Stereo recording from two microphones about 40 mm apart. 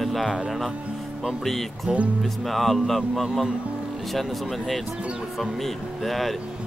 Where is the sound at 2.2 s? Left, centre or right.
Centre.